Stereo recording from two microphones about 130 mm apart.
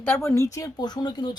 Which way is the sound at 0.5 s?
30° left (ahead or behind).